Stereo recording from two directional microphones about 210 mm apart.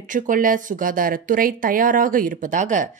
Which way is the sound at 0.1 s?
40° right (ahead or behind).